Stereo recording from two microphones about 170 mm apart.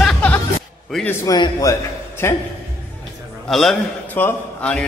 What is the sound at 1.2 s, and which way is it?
A man's voice, 20° left (ahead or behind).